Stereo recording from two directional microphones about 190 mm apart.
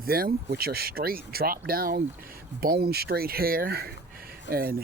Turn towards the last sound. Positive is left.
turn(degrees=-50)  # may be behind; listen again after turning